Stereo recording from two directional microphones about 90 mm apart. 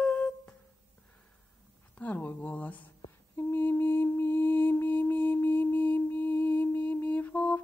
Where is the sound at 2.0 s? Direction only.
20° left (ahead or behind).